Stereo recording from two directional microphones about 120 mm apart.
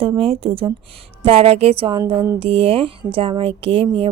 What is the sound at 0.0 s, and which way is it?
Speech, 50° right (ahead or behind).